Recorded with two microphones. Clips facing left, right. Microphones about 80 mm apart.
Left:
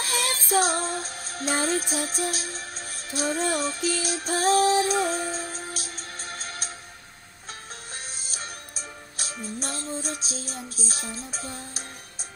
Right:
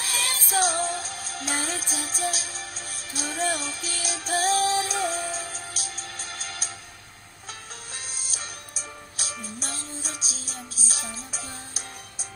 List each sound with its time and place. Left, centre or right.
0.0 s music: left
9.2 s music: left